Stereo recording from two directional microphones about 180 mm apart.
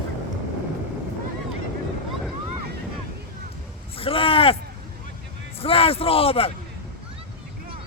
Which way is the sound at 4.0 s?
30° left (ahead or behind).